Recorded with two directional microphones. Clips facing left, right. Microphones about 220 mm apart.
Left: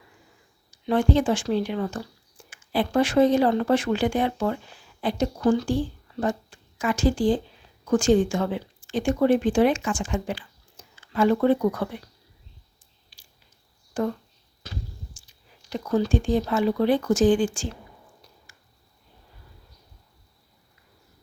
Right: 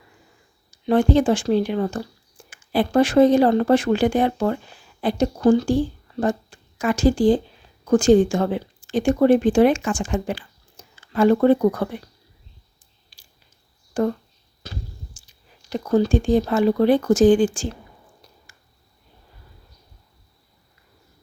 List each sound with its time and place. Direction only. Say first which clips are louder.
0.9 s speech: right 4 dB; 40° right (ahead or behind)
15.7 s speech: right 4 dB; 40° right (ahead or behind)